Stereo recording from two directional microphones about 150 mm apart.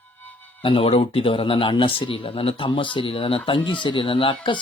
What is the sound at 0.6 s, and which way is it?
Speech, 35° left (ahead or behind).